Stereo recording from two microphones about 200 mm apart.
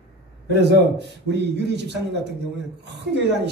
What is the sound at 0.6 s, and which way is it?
Speech, 60° right (ahead or behind).